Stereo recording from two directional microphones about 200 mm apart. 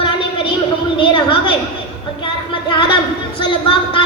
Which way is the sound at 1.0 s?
25° left (ahead or behind).